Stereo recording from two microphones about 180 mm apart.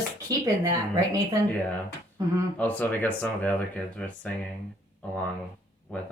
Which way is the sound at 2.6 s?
10° left (ahead or behind).